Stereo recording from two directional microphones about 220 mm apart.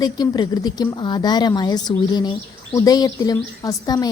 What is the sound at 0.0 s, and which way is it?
A woman's voice, 15° left (ahead or behind).